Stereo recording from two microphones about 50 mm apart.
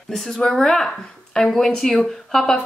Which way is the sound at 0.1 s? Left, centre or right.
Centre.